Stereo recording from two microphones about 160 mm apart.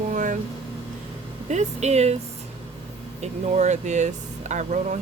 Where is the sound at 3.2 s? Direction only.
45° right (ahead or behind).